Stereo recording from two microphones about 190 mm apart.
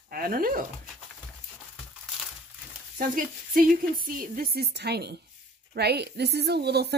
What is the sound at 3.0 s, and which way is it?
Speech, 45° right (ahead or behind).